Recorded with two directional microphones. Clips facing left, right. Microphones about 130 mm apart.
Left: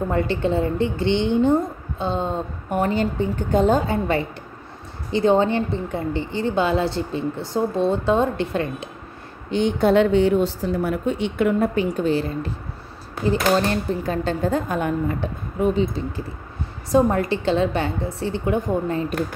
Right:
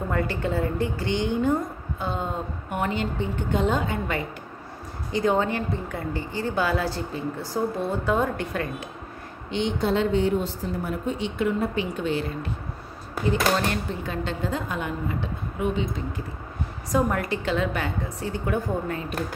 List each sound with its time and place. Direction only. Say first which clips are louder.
0.1 s a woman's voice: left 4 dB; 25° left (ahead or behind)
2.7 s a woman's voice: left 6 dB; 40° left (ahead or behind)
9.5 s a woman's voice: left 6 dB; 55° left (ahead or behind)
15.6 s a woman's voice: left 6 dB; 35° left (ahead or behind)